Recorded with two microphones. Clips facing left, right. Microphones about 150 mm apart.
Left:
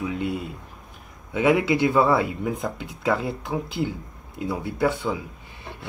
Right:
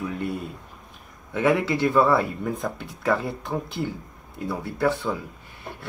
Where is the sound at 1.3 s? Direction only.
15° left (ahead or behind).